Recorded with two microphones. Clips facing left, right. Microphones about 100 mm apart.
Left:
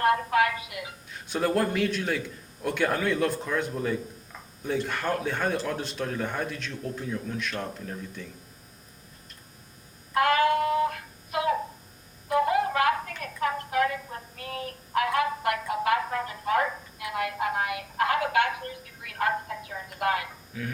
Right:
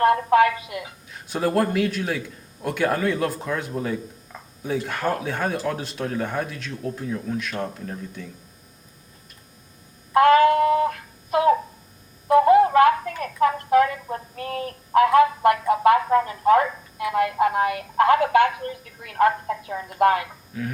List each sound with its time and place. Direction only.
0.0 s music: 35° right (ahead or behind)
1.1 s speech: centre (ahead or behind)
10.2 s a sound: 35° right (ahead or behind)
17.0 s telephone: 30° right (ahead or behind)
19.0 s speech: 35° right (ahead or behind)